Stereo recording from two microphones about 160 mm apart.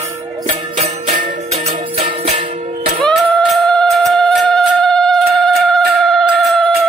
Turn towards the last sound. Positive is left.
turn(degrees=0)  # may be behind; listen again after turning